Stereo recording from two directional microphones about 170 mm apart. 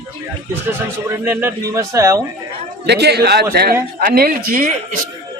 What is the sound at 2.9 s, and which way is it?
Speech, 75° right (ahead or behind).